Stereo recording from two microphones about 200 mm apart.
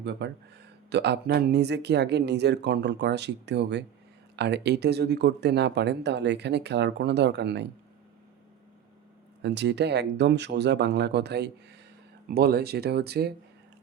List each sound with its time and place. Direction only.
0.0 s speech: 60° right (ahead or behind)
9.4 s speech: 60° right (ahead or behind)